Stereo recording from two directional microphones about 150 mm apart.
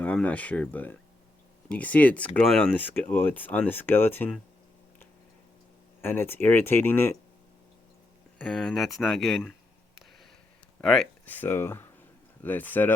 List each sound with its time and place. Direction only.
0.0 s speech: 10° left (ahead or behind)
6.0 s speech: 15° left (ahead or behind)
8.4 s speech: 5° left (ahead or behind)
10.8 s speech: 5° left (ahead or behind)